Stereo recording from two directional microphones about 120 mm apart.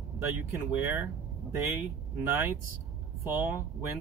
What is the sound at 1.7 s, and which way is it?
Speech, 20° right (ahead or behind).